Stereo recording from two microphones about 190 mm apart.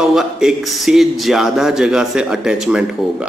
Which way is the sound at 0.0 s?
5° right (ahead or behind).